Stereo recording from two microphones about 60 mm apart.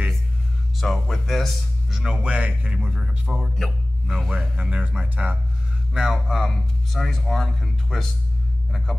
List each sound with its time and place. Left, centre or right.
0.7 s a man's voice: centre
2.2 s speech: right
3.5 s a man's voice: centre
4.6 s speech: centre
5.9 s a man's voice: centre